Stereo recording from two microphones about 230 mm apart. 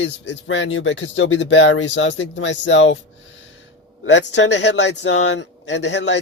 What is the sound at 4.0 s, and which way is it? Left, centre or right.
Speech, left.